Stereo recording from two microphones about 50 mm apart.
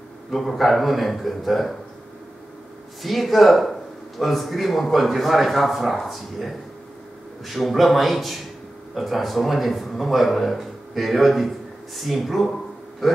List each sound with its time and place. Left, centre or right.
0.3 s speech: centre
3.0 s speech: centre
13.0 s a sound: centre